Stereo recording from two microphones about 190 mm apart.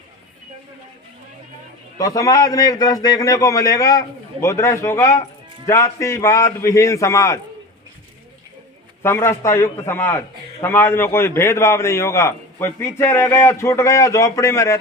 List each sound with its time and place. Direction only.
2.0 s a man's voice: 20° left (ahead or behind)
9.0 s a man's voice: 15° left (ahead or behind)